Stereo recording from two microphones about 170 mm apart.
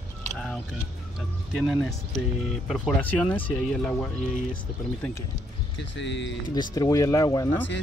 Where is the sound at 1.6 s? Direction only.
Centre (ahead or behind).